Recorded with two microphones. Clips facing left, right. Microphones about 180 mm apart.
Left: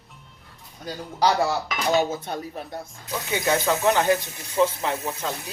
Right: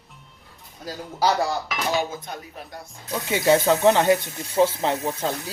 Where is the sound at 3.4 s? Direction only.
30° right (ahead or behind).